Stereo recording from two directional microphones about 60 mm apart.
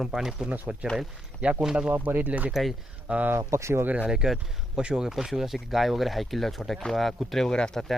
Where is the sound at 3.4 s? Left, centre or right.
Right.